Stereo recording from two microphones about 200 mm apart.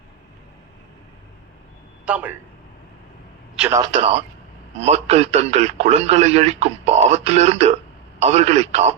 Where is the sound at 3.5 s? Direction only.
5° right (ahead or behind).